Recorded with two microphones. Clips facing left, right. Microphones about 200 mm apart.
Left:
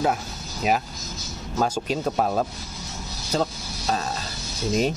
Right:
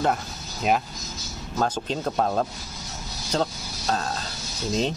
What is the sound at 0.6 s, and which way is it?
Speech, centre (ahead or behind).